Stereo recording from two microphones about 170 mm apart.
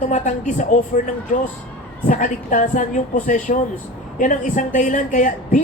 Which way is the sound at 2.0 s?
50° left (ahead or behind).